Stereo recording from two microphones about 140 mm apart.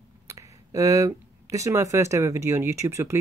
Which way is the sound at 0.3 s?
25° right (ahead or behind).